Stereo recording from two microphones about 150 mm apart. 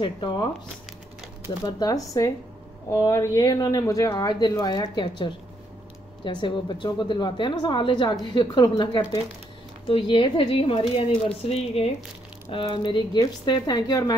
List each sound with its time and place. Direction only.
0.0 s a woman's voice: 30° left (ahead or behind)
1.6 s a woman's voice: 25° left (ahead or behind)